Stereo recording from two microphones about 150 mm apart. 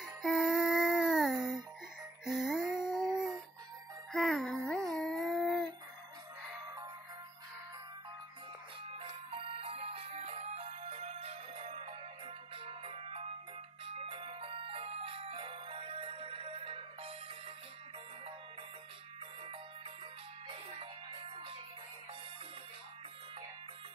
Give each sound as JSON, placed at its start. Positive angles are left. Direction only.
{"t": 0.0, "sound": "music", "side_deg": 0}
{"t": 2.2, "sound": "a sound", "side_deg": 0}
{"t": 4.1, "sound": "music", "side_deg": 0}
{"t": 8.9, "sound": "music", "side_deg": -35}